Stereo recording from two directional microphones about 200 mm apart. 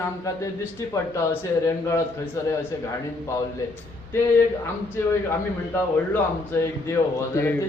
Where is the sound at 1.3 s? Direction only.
15° left (ahead or behind).